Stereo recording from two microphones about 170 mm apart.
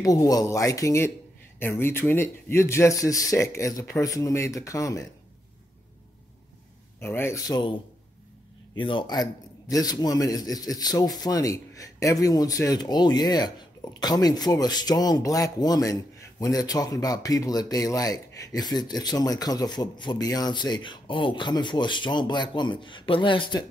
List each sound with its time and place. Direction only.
0.0 s a man's voice: 20° left (ahead or behind)
7.0 s a man's voice: 15° left (ahead or behind); by 23.6 s 30° left (ahead or behind)